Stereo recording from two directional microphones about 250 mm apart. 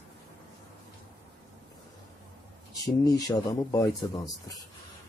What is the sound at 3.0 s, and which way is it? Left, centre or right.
A man's voice, centre.